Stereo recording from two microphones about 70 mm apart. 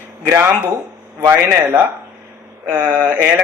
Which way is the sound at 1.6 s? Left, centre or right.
Right.